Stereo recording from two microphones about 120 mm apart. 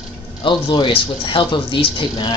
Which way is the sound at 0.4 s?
45° left (ahead or behind).